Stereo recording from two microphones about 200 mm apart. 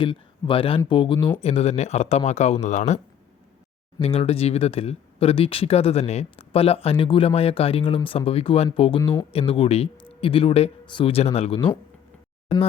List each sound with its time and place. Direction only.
0.0 s speech: 25° left (ahead or behind)